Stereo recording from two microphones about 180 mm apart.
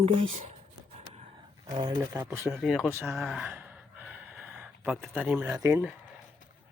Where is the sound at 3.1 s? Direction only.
Centre (ahead or behind).